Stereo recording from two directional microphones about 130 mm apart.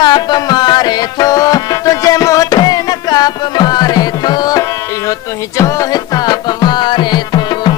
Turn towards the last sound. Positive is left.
turn(degrees=35)  # may be behind; listen again after turning